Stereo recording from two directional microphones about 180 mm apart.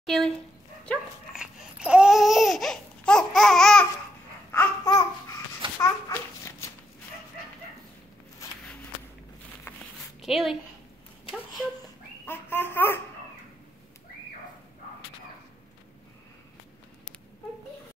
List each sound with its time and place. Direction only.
0.0 s speech: centre (ahead or behind)
0.8 s babbling: 5° right (ahead or behind); by 6.7 s 15° left (ahead or behind)
9.7 s zipper: 15° left (ahead or behind)
10.2 s a woman's voice: centre (ahead or behind)
12.3 s a sound: 10° left (ahead or behind)